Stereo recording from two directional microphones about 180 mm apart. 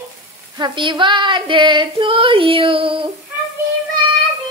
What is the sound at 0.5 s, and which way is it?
Female singing, 25° right (ahead or behind).